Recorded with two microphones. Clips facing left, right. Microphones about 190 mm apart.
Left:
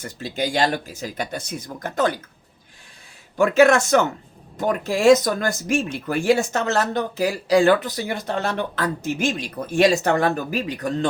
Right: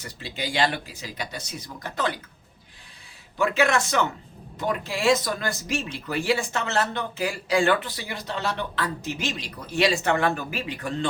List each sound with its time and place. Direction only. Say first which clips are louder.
0.0 s speech: left 7 dB; 45° left (ahead or behind)
3.3 s speech: left 7 dB; 45° left (ahead or behind)